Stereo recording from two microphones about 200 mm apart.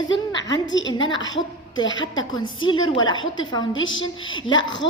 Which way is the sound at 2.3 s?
20° left (ahead or behind).